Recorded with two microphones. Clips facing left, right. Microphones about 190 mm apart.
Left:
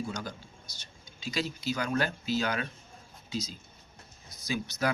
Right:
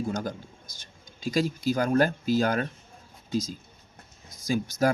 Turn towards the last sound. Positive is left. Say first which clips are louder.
# right 6 dB
turn(degrees=-45)  # may be behind; listen again after turning